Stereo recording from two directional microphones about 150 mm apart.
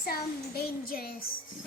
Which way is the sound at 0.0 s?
80° left.